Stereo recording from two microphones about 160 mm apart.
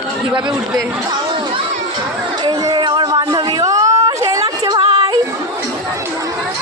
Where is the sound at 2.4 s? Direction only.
30° right (ahead or behind).